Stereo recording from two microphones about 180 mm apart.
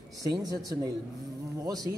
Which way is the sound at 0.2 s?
20° right (ahead or behind).